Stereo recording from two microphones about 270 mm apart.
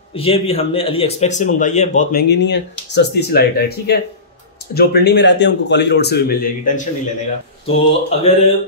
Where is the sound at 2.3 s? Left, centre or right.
Left.